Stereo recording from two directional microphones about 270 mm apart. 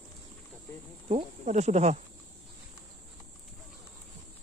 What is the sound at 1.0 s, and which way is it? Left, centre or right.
Speech, right.